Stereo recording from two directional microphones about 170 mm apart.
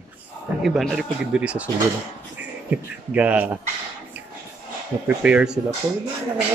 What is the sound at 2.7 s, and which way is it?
Speech, 10° right (ahead or behind).